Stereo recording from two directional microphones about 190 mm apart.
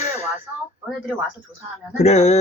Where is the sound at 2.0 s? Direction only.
35° left (ahead or behind).